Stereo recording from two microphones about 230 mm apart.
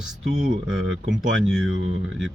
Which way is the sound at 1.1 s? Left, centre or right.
Centre.